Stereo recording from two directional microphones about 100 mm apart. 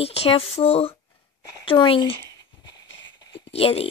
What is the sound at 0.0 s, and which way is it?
Speech, 80° left.